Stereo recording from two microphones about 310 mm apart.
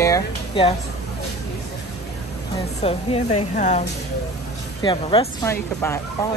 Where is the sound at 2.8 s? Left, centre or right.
Centre.